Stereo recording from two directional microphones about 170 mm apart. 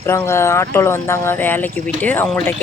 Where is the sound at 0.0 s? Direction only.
15° left (ahead or behind).